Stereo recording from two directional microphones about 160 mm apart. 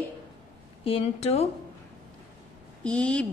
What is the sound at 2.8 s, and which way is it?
Speech, 5° left (ahead or behind).